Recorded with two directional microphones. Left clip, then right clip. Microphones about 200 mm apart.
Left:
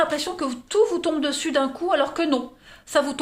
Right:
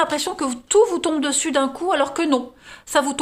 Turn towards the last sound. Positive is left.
turn(degrees=-35)  # may be behind; listen again after turning